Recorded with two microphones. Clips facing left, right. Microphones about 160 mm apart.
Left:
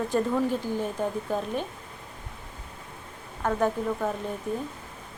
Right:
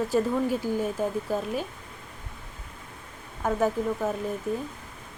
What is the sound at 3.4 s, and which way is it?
Speech, 5° right (ahead or behind).